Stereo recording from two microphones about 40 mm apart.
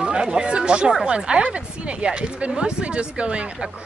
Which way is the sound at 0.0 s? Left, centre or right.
Right.